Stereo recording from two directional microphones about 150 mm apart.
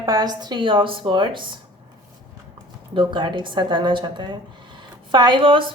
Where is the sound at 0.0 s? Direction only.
25° right (ahead or behind).